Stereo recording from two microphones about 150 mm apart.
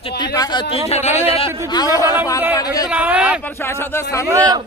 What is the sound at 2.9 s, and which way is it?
Speech, 10° right (ahead or behind).